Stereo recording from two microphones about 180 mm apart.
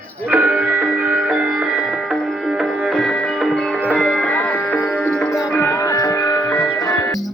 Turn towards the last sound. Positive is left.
turn(degrees=20)  # may be behind; listen again after turning